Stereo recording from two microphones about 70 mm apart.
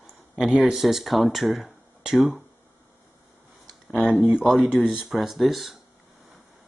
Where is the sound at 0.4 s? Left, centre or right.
Centre.